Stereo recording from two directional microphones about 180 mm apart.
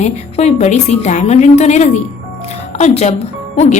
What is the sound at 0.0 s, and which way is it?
A woman's voice, 40° left (ahead or behind).